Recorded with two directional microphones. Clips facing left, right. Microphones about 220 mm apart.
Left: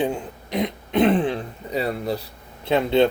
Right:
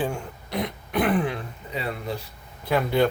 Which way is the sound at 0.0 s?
20° left (ahead or behind).